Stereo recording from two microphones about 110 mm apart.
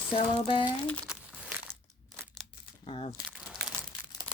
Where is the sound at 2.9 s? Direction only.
65° left (ahead or behind).